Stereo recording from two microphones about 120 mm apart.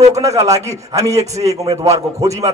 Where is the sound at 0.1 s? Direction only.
25° right (ahead or behind).